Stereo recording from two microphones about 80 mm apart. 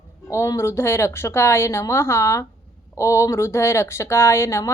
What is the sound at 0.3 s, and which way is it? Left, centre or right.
Speech, left.